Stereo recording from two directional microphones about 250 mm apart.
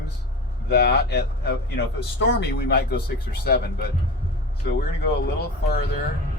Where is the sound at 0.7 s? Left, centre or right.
Left.